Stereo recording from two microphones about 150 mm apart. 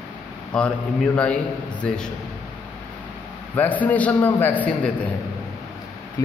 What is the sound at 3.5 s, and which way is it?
A man's voice, 10° left (ahead or behind).